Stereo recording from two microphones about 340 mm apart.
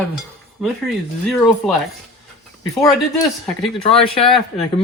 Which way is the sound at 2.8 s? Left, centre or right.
Centre.